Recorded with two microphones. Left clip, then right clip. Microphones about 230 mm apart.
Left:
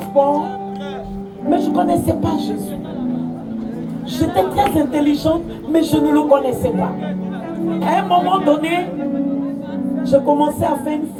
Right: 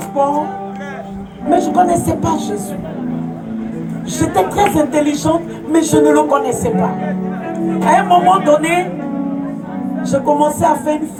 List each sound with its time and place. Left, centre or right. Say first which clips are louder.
1.5 s speech: right 4 dB; right
4.2 s speech: right 2 dB; right
7.8 s speech: right 5 dB; right
10.0 s speech: right 1 dB; right